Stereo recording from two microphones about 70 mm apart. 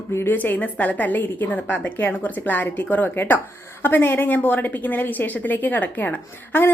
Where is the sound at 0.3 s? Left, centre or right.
Left.